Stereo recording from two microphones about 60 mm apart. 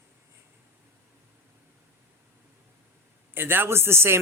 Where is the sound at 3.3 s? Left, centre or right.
Right.